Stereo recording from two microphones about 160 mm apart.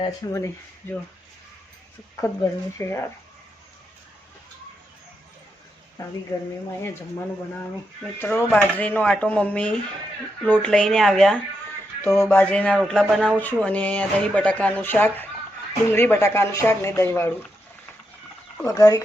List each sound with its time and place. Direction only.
0.3 s speech: 20° left (ahead or behind)
2.2 s speech: 15° left (ahead or behind)
7.6 s speech: 10° left (ahead or behind)
12.0 s speech: 15° left (ahead or behind)
18.6 s speech: 20° left (ahead or behind)